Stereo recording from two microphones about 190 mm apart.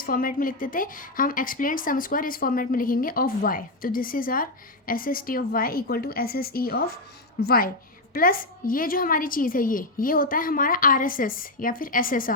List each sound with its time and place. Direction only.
0.0 s a woman's voice: 50° left (ahead or behind)